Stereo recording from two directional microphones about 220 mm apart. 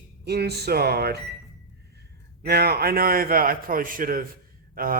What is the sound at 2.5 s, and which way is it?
A man's voice, 45° right (ahead or behind).